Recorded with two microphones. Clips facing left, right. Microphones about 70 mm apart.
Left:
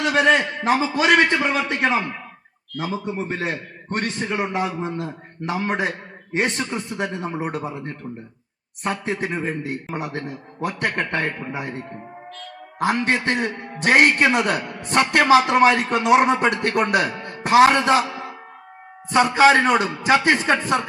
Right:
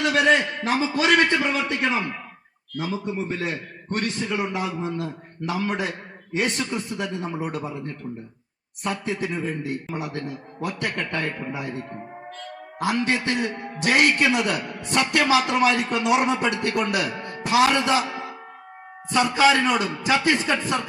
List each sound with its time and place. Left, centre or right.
0.6 s a man's voice: left
3.2 s a man's voice: left
8.8 s a man's voice: left
12.8 s a man's voice: left
19.1 s a man's voice: left